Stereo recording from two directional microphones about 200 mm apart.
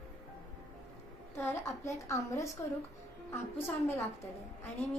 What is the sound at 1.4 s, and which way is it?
A woman's voice, 10° left (ahead or behind).